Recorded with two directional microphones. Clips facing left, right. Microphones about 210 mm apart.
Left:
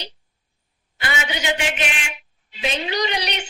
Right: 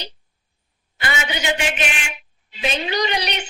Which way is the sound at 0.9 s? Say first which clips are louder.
Right 1 dB; 45° right (ahead or behind).